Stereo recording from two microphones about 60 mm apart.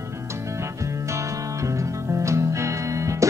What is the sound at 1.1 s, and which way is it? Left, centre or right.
Music, right.